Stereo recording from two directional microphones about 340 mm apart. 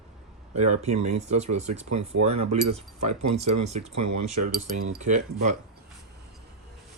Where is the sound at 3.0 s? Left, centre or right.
Right.